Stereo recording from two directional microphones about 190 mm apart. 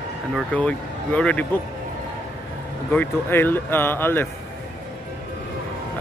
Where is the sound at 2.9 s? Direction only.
10° left (ahead or behind).